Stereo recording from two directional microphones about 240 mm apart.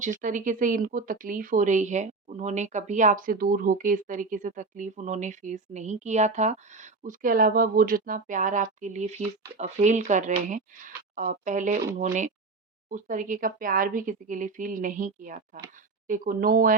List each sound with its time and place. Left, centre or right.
0.0 s speech: right